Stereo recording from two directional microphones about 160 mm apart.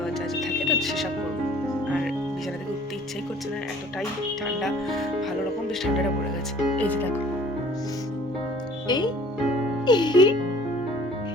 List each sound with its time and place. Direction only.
0.3 s music: centre (ahead or behind)
6.7 s speech: 10° left (ahead or behind)
8.9 s speech: 25° left (ahead or behind)
9.8 s music: 25° left (ahead or behind)